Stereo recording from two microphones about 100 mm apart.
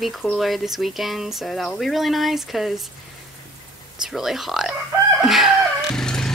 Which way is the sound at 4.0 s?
5° right (ahead or behind).